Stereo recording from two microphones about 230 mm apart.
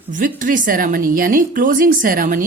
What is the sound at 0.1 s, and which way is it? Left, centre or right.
Speech, right.